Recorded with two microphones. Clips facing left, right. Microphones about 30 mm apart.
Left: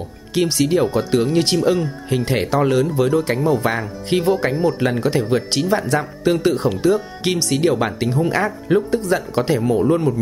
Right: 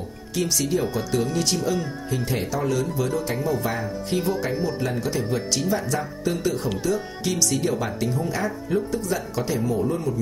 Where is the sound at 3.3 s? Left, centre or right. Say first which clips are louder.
Left 7 dB; left.